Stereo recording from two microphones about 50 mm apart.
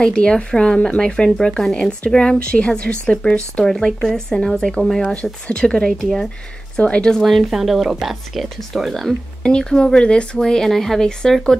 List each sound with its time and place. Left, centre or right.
0.0 s speech: centre
5.9 s speech: centre
6.8 s speech: centre
7.2 s speech: centre
9.4 s speech: centre